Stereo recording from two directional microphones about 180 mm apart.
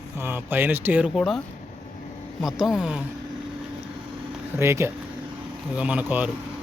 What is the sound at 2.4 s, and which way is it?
Speech, 5° right (ahead or behind).